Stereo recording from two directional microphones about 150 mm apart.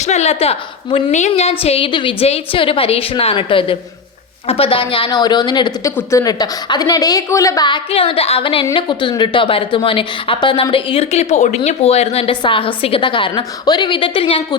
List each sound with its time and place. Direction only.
0.0 s a woman's voice: 50° left (ahead or behind); by 7.8 s 25° left (ahead or behind)
7.9 s a woman's voice: 40° left (ahead or behind)